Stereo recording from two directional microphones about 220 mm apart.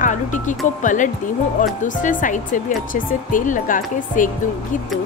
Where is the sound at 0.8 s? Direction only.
35° left (ahead or behind).